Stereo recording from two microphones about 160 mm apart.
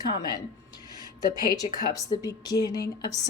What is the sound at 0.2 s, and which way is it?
Speech, 25° left (ahead or behind).